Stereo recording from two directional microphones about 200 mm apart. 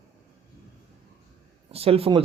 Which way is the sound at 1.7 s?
30° right (ahead or behind).